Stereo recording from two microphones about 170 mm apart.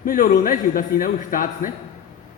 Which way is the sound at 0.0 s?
55° left (ahead or behind).